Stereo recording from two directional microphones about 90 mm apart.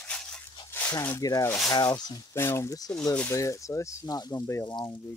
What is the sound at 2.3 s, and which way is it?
Speech, 30° left (ahead or behind).